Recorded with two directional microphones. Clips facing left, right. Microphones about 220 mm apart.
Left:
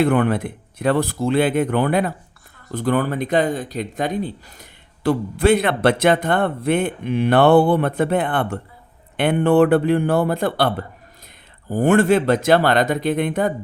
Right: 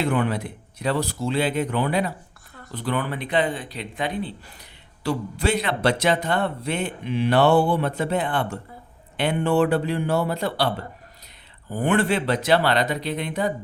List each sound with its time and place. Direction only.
0.0 s speech: 55° left (ahead or behind)